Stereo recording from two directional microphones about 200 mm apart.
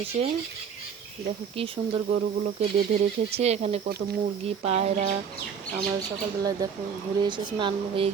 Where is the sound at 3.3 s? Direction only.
30° right (ahead or behind).